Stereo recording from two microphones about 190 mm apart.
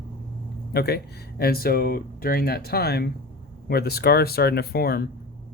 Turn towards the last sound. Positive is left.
turn(degrees=55)  # may be behind; listen again after turning